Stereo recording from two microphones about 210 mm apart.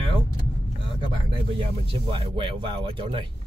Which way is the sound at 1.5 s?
25° right (ahead or behind).